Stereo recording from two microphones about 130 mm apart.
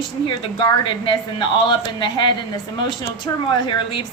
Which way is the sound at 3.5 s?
35° left (ahead or behind).